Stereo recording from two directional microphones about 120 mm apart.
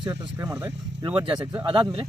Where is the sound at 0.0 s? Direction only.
25° right (ahead or behind).